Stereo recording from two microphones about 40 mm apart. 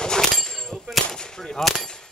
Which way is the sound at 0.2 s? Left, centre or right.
Centre.